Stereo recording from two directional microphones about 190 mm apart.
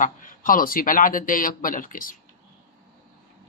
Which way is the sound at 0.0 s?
45° left (ahead or behind).